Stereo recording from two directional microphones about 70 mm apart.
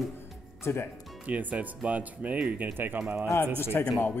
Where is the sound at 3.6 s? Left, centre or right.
Left.